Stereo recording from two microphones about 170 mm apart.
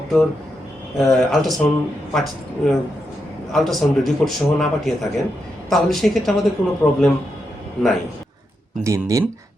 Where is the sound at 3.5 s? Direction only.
Centre (ahead or behind).